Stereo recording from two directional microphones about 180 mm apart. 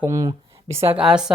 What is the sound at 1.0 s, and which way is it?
Speech, 5° right (ahead or behind).